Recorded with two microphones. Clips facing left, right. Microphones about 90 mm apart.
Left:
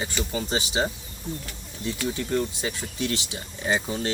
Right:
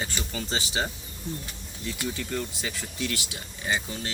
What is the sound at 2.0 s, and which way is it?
Speech, 25° left (ahead or behind).